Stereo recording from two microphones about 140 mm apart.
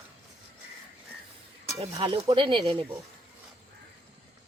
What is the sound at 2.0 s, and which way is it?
Speech, 40° right (ahead or behind).